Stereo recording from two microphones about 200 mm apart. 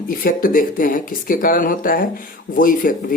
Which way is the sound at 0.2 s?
45° left (ahead or behind).